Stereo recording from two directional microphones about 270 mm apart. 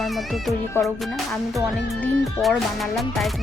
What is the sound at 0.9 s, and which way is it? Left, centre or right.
Music, centre.